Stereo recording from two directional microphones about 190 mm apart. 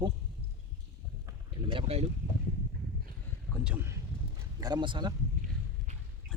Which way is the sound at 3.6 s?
5° right (ahead or behind).